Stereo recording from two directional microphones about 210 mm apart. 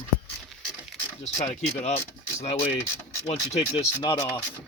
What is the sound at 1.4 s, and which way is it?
Speech, 30° left (ahead or behind).